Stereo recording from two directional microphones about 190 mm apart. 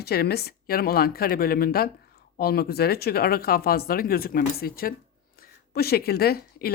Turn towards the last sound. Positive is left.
turn(degrees=55)  # may be behind; listen again after turning